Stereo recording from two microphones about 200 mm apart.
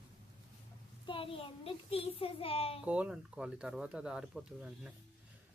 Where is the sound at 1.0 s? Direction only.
25° left (ahead or behind).